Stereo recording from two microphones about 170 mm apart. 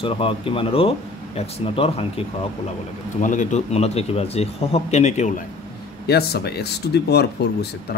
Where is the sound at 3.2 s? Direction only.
45° left (ahead or behind).